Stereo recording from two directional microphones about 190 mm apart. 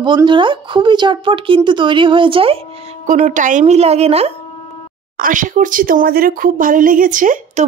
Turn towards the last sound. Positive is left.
turn(degrees=-45)  # may be behind; listen again after turning